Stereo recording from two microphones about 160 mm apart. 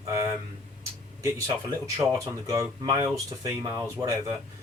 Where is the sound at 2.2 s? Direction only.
20° right (ahead or behind).